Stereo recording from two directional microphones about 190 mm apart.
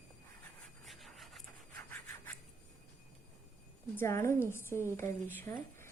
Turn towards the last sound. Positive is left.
turn(degrees=10)  # may be behind; listen again after turning